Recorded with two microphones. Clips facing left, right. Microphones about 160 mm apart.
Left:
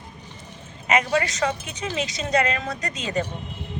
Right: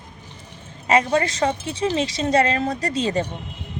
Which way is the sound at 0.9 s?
30° right (ahead or behind).